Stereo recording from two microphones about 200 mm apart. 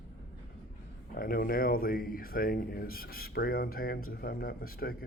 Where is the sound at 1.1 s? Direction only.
45° left (ahead or behind).